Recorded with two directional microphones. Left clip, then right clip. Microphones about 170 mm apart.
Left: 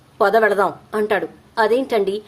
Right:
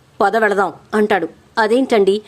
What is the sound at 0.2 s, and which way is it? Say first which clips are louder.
A woman's voice: right 1 dB; 45° right (ahead or behind).